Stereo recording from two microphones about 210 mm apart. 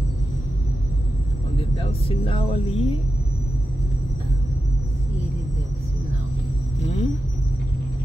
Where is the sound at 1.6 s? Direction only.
25° left (ahead or behind).